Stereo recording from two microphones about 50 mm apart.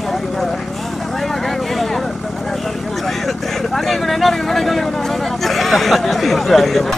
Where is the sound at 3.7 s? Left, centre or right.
Centre.